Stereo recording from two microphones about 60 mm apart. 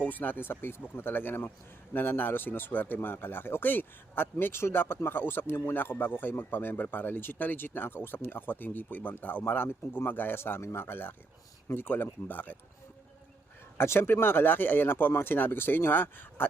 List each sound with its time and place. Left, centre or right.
0.0 s speech: left
13.7 s speech: left